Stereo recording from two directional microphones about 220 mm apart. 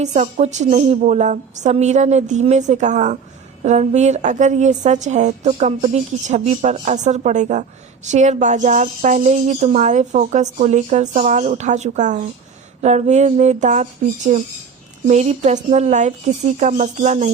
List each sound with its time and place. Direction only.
0.0 s speech: 30° right (ahead or behind)